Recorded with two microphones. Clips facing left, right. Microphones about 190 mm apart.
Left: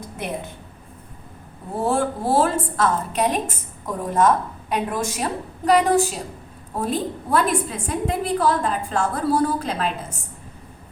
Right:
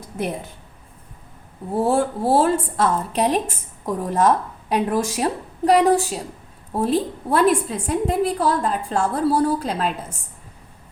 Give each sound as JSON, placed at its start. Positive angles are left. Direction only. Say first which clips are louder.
{"t": 1.8, "sound": "a woman's voice", "louder": "right 2 dB", "side_deg": -30}